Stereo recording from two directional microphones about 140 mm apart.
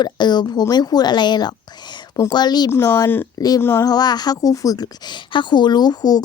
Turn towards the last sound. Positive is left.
turn(degrees=30)  # may be behind; listen again after turning